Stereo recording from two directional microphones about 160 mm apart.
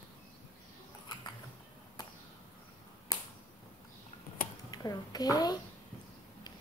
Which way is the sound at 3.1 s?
25° left (ahead or behind).